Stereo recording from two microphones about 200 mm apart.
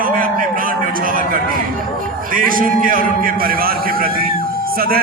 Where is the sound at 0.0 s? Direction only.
45° right (ahead or behind).